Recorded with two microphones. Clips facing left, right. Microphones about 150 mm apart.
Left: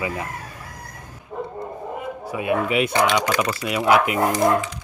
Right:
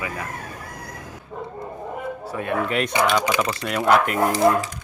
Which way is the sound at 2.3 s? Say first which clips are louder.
Left 3 dB; 10° left (ahead or behind).